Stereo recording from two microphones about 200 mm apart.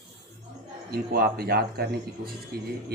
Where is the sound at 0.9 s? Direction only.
50° right (ahead or behind).